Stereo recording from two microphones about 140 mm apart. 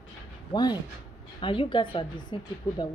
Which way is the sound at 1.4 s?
35° left (ahead or behind).